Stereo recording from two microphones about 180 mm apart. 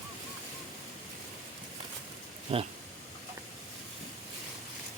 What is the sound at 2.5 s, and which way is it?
Speech, 30° right (ahead or behind).